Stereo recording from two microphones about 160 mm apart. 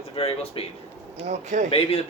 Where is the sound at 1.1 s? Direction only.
45° right (ahead or behind).